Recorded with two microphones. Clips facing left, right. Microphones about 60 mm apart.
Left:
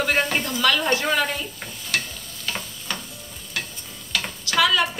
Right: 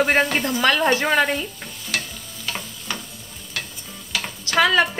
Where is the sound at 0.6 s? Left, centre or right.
Right.